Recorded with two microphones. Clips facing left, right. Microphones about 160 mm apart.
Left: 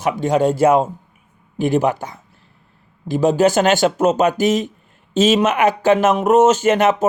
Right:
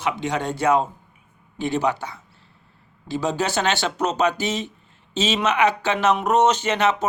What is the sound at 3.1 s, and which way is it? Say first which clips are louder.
A man's voice: left 9 dB; 50° left (ahead or behind).